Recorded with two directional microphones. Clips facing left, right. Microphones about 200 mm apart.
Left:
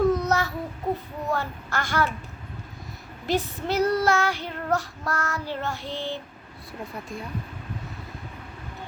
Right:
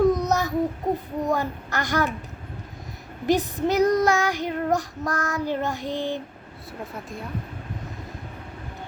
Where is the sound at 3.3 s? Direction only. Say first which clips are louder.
Right 4 dB; 15° right (ahead or behind).